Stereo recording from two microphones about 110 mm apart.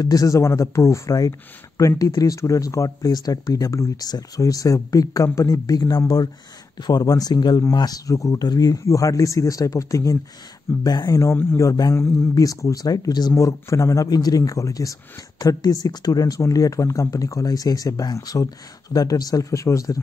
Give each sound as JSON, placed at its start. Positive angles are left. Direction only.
{"t": 0.0, "sound": "speech", "side_deg": 30}